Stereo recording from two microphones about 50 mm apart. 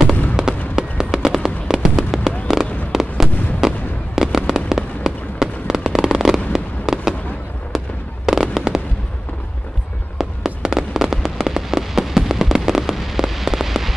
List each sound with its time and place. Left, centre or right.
0.1 s a sound: left
0.7 s fireworks: centre
10.1 s fireworks: centre